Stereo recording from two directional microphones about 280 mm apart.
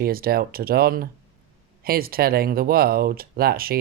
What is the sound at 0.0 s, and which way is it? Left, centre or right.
Speech, right.